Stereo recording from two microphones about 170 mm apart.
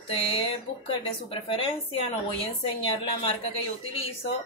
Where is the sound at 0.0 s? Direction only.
35° left (ahead or behind).